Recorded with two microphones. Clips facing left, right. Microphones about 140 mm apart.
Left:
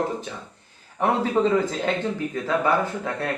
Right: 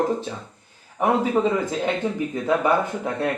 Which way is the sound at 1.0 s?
10° right (ahead or behind).